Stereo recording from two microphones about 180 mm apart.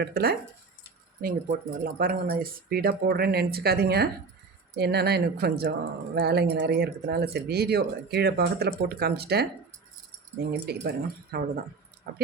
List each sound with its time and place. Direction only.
0.0 s speech: 60° right (ahead or behind)
10.5 s speech: 60° right (ahead or behind)